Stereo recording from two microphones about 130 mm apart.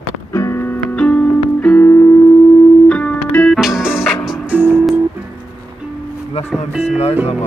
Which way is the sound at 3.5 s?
Centre (ahead or behind).